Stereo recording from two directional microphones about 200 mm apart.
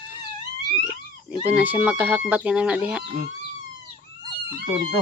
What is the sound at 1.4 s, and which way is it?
Speech, 10° right (ahead or behind).